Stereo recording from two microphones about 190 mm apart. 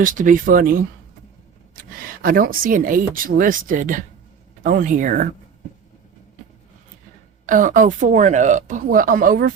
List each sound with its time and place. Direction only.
0.0 s speech: 45° right (ahead or behind)
7.4 s speech: 45° right (ahead or behind)